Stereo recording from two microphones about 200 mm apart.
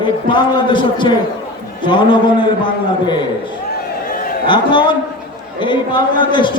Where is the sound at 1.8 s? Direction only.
25° left (ahead or behind).